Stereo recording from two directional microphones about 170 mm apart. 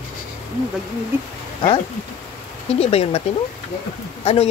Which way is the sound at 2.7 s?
35° left (ahead or behind).